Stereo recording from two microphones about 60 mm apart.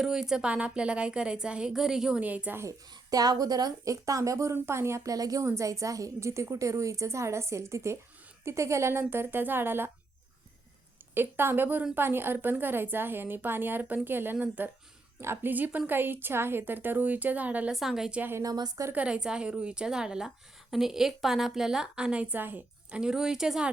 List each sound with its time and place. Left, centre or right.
0.0 s a woman's voice: centre
2.2 s a woman's voice: right
3.1 s speech: right
4.5 s a woman's voice: right
5.0 s speech: right
5.4 s a woman's voice: right
11.1 s a woman's voice: right
17.7 s a woman's voice: centre
18.9 s a woman's voice: centre
22.4 s a woman's voice: right
22.9 s a woman's voice: centre